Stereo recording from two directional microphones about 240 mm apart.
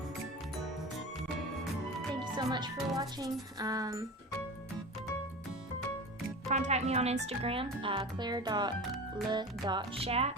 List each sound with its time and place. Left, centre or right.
2.1 s music: centre
3.6 s speech: centre
6.5 s speech: right
8.8 s speech: centre
9.3 s speech: centre